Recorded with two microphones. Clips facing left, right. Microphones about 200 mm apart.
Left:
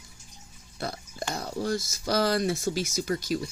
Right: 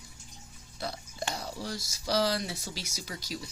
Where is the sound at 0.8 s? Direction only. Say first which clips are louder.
Left 2 dB; 50° left (ahead or behind).